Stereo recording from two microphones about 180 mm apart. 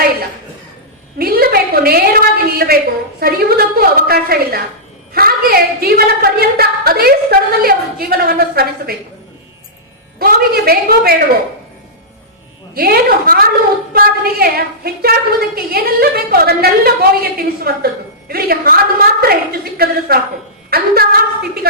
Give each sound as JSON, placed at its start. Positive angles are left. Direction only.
{"t": 1.2, "sound": "a sound", "side_deg": -60}
{"t": 3.2, "sound": "a woman's voice", "side_deg": -55}
{"t": 10.2, "sound": "a woman's voice", "side_deg": -55}
{"t": 12.7, "sound": "a woman's voice", "side_deg": -55}